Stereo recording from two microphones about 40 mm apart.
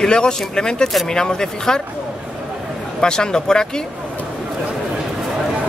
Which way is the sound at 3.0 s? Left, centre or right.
Centre.